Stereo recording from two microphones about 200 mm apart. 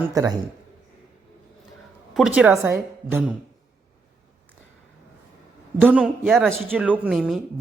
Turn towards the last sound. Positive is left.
turn(degrees=0)  # may be behind; listen again after turning